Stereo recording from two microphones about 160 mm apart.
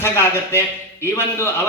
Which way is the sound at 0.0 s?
15° left (ahead or behind).